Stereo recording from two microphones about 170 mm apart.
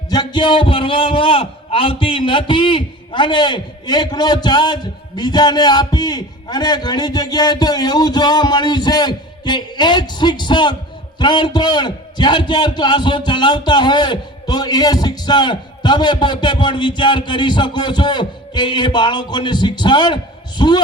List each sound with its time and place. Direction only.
0.1 s a man's voice: 25° left (ahead or behind)